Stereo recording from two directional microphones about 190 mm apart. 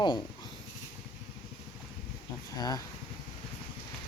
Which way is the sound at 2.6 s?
20° left (ahead or behind).